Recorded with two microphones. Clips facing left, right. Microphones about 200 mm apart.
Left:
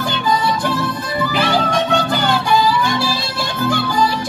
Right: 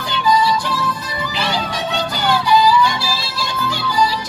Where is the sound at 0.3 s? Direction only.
55° left (ahead or behind).